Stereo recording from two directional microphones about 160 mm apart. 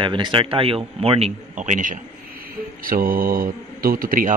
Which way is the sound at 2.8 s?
65° right (ahead or behind).